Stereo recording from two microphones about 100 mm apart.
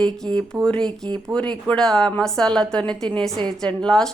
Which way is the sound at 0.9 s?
45° right (ahead or behind).